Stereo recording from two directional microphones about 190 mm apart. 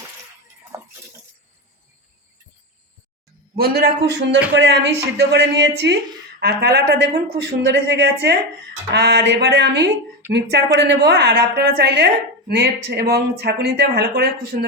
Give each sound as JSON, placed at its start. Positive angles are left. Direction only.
{"t": 3.5, "sound": "a woman's voice", "side_deg": -55}
{"t": 10.2, "sound": "speech", "side_deg": -10}
{"t": 10.8, "sound": "a woman's voice", "side_deg": -65}